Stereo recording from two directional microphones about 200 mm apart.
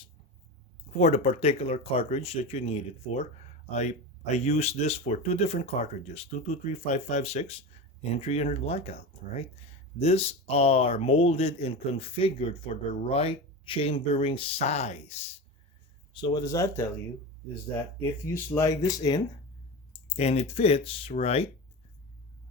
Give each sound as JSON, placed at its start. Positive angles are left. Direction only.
{"t": 0.9, "sound": "speech", "side_deg": 35}
{"t": 16.1, "sound": "speech", "side_deg": 20}
{"t": 18.3, "sound": "speech", "side_deg": 15}
{"t": 20.1, "sound": "speech", "side_deg": 35}